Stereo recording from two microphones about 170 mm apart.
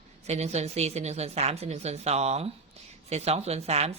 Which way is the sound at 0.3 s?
40° right (ahead or behind).